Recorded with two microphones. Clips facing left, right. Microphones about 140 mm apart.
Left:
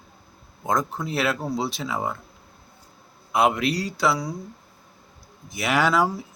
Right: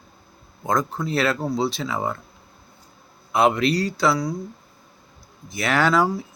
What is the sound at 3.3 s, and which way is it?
Speech, 10° left (ahead or behind).